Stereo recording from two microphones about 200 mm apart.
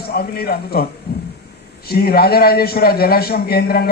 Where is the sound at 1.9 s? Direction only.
50° left (ahead or behind).